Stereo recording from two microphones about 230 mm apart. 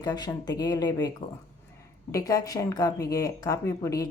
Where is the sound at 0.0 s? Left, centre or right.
Centre.